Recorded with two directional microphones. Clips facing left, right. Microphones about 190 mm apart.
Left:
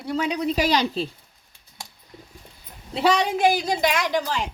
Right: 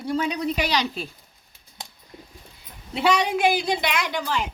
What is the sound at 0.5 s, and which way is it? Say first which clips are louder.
Speech: left 3 dB; 40° left (ahead or behind).